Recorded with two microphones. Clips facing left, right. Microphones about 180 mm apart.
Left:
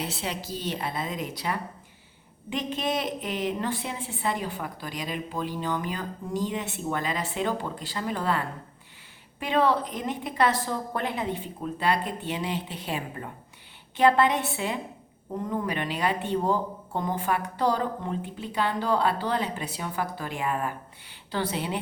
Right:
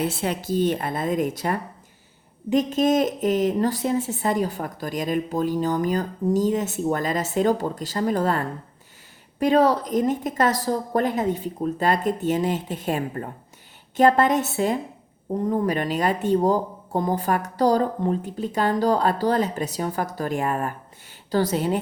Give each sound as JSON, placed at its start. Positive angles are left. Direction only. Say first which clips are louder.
{"t": 0.0, "sound": "a woman's voice", "louder": "right 7 dB", "side_deg": -50}